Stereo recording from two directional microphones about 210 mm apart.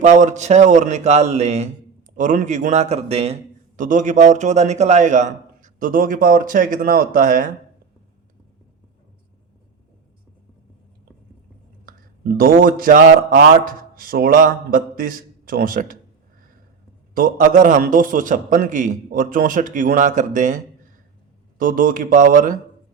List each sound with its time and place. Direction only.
0.0 s a man's voice: 35° right (ahead or behind)
12.4 s a man's voice: 45° right (ahead or behind)
17.2 s a man's voice: 40° right (ahead or behind)
21.6 s a man's voice: 40° right (ahead or behind)